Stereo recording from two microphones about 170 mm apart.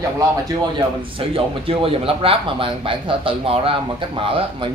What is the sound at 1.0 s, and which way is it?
Speech, 30° right (ahead or behind).